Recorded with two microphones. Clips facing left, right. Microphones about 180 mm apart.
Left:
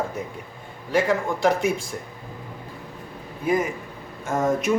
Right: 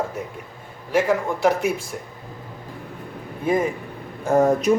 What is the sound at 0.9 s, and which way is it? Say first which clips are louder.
Speech: right 2 dB; centre (ahead or behind).